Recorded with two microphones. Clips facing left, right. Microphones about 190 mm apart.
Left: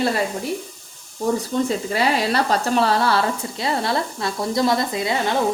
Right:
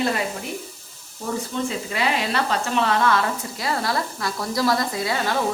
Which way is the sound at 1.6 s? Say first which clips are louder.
Left 4 dB; 35° left (ahead or behind).